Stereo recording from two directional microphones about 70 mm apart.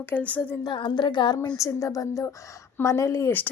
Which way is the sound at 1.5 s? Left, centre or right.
Left.